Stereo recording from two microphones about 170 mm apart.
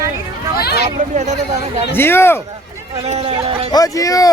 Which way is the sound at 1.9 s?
15° left (ahead or behind).